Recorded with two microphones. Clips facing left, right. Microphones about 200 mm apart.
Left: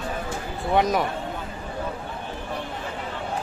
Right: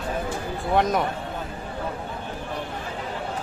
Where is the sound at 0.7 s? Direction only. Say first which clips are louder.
Left 1 dB; centre (ahead or behind).